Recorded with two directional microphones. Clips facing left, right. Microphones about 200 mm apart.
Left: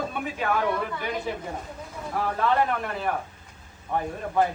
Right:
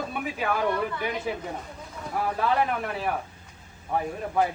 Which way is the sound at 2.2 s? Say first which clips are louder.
Left 1 dB; 5° right (ahead or behind).